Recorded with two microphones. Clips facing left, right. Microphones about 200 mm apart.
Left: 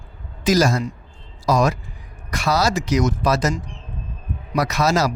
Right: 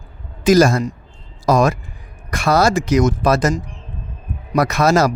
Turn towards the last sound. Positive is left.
turn(degrees=-55)  # may be behind; listen again after turning